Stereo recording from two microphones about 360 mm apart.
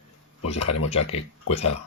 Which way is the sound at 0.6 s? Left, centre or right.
Left.